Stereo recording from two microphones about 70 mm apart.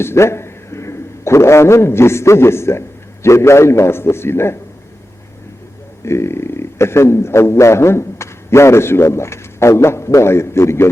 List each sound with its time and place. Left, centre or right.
0.0 s a man's voice: left
6.1 s a man's voice: left